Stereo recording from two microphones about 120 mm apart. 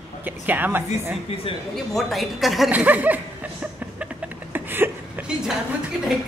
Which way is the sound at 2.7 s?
15° right (ahead or behind).